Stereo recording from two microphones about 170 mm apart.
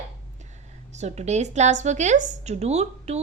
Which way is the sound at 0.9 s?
40° right (ahead or behind).